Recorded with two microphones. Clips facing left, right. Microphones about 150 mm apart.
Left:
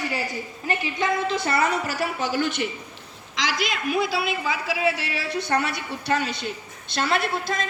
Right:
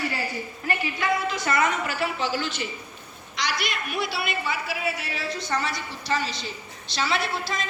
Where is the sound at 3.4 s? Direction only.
90° left.